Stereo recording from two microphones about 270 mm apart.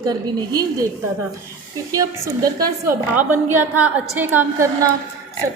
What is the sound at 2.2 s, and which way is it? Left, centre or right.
A woman's voice, centre.